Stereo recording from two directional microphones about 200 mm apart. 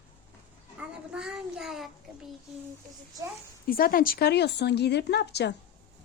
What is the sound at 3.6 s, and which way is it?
A woman's voice, 45° left (ahead or behind).